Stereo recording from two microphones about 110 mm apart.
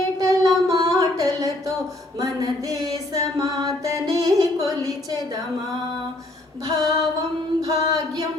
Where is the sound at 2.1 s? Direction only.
35° right (ahead or behind).